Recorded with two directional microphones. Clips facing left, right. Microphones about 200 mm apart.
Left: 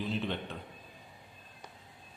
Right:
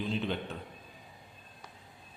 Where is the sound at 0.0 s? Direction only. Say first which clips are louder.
Right 1 dB; centre (ahead or behind).